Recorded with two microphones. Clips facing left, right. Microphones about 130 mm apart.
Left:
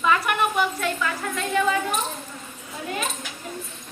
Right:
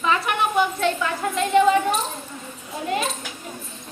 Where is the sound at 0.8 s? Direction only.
25° right (ahead or behind).